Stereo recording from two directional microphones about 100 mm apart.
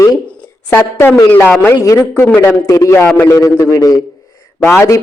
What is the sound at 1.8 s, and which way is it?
A woman's voice, 30° left (ahead or behind).